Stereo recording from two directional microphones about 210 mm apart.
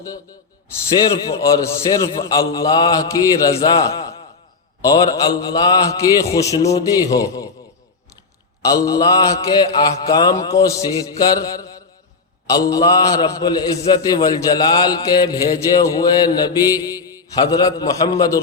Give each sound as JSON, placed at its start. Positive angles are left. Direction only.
{"t": 1.0, "sound": "a man's voice", "side_deg": 20}
{"t": 4.8, "sound": "mantra", "side_deg": 15}
{"t": 8.6, "sound": "mantra", "side_deg": 15}
{"t": 12.5, "sound": "a man's voice", "side_deg": 20}